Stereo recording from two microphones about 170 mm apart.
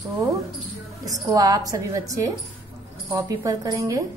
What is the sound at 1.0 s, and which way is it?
A woman's voice, 20° right (ahead or behind).